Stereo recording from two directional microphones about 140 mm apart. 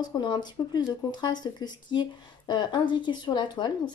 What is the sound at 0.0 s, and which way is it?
Speech, 30° left (ahead or behind).